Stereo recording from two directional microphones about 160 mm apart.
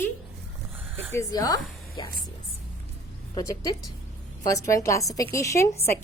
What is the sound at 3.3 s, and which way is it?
Speech, 20° left (ahead or behind).